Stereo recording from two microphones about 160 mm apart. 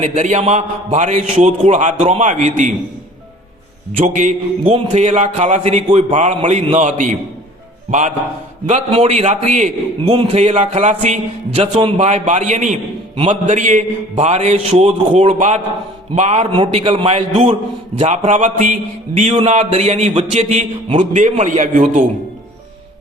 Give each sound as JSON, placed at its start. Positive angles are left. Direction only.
{"t": 0.0, "sound": "a man's voice", "side_deg": -45}
{"t": 4.0, "sound": "a man's voice", "side_deg": -50}
{"t": 8.9, "sound": "a man's voice", "side_deg": -40}
{"t": 10.1, "sound": "a man's voice", "side_deg": -35}